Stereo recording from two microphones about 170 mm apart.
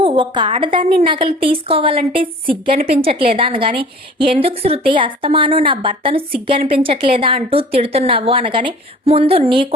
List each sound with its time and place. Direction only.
0.0 s a woman's voice: 30° right (ahead or behind)